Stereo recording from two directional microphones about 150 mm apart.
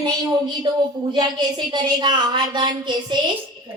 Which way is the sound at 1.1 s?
30° right (ahead or behind).